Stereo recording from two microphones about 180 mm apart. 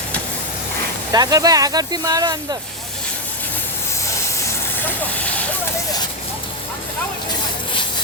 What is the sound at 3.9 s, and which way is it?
Vehicle, 15° left (ahead or behind).